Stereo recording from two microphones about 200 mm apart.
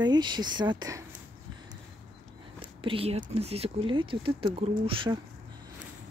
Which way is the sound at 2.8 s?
30° right (ahead or behind).